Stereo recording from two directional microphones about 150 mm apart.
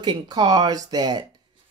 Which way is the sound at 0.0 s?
30° right (ahead or behind).